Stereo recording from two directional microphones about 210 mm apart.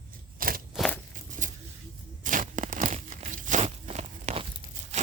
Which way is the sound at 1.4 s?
40° right (ahead or behind).